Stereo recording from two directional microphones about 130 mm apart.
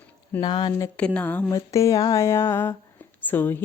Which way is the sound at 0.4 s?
35° left (ahead or behind).